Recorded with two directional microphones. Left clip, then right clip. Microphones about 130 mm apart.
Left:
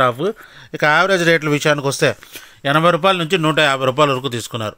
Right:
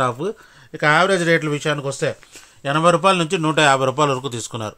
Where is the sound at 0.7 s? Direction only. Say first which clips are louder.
Left 2 dB; 40° left (ahead or behind).